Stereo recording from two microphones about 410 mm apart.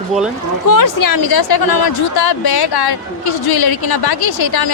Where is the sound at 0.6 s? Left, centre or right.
Left.